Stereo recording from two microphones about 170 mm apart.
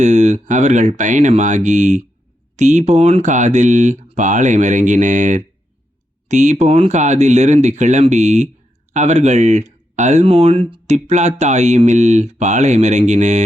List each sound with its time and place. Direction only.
0.0 s speech: 45° right (ahead or behind)